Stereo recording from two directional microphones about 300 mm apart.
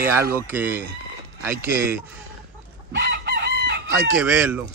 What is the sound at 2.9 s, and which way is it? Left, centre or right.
Chicken, right.